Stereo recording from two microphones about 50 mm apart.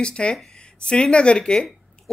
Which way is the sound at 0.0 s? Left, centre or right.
Centre.